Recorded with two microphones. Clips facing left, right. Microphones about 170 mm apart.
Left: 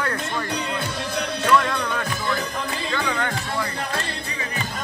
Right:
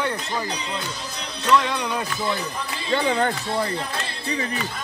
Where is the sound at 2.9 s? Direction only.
30° right (ahead or behind).